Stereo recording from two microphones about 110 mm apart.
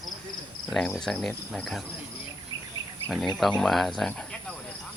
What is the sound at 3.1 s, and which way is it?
Speech, centre (ahead or behind).